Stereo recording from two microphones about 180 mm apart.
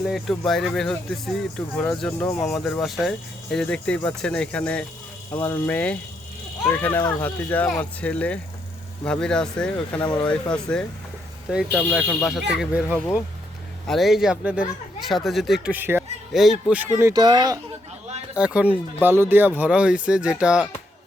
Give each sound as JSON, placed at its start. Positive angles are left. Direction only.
{"t": 0.0, "sound": "speech", "side_deg": 0}
{"t": 10.0, "sound": "speech", "side_deg": 25}
{"t": 10.2, "sound": "speech", "side_deg": 5}
{"t": 18.3, "sound": "speech", "side_deg": -5}